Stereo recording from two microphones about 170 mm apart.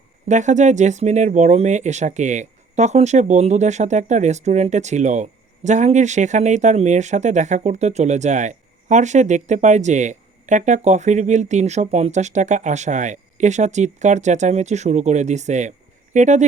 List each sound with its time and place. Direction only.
0.3 s speech: 45° right (ahead or behind)